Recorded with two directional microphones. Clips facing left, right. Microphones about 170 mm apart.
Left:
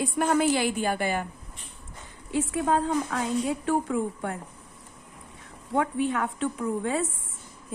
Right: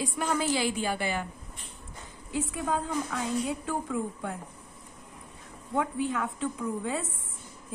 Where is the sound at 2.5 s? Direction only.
75° left (ahead or behind).